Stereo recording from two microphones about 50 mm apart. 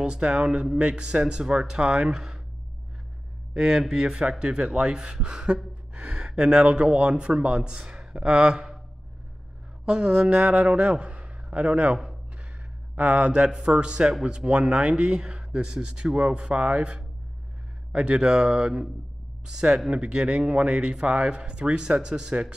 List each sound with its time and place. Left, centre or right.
0.0 s speech: centre
2.1 s speech: centre
3.5 s a man's voice: centre
9.8 s a man's voice: right